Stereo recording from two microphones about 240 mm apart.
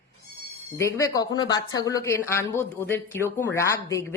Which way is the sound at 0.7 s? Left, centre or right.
Centre.